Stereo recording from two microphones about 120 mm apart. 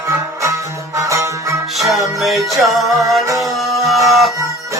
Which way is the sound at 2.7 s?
Centre (ahead or behind).